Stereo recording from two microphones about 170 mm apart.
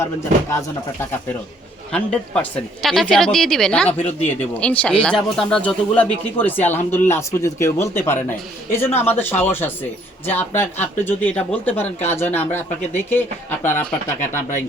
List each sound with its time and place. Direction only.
1.9 s speech: 5° left (ahead or behind)
14.2 s speech: 50° left (ahead or behind)